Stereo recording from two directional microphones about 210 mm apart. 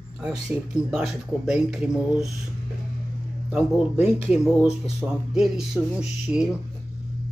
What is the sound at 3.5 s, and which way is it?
Speech, 5° right (ahead or behind).